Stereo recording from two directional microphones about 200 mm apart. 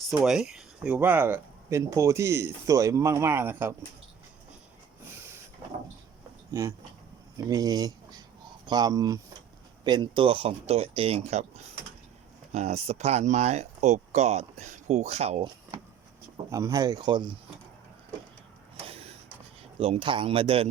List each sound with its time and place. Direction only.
0.2 s speech: centre (ahead or behind)
6.5 s speech: 15° right (ahead or behind)
16.5 s speech: 15° right (ahead or behind)
19.8 s speech: 30° right (ahead or behind)